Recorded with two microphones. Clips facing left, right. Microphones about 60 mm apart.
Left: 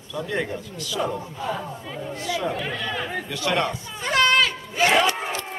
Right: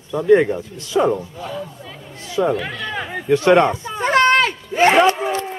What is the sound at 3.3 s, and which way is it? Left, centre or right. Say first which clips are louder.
Speech: right 12 dB; right.